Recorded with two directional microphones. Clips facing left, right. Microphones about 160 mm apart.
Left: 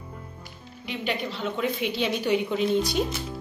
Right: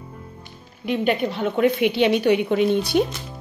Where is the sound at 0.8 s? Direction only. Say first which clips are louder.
Right 9 dB; 55° right (ahead or behind).